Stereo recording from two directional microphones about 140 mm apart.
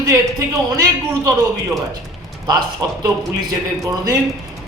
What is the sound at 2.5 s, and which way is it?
A man's voice, 30° right (ahead or behind).